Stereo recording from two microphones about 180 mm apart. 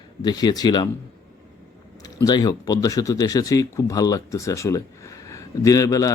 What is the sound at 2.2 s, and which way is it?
Speech, 20° left (ahead or behind).